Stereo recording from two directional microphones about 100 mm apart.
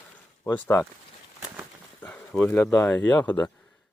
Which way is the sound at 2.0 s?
15° left (ahead or behind).